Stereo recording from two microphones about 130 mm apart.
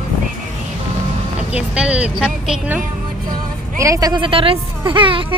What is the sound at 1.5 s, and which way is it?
Speech, 10° right (ahead or behind).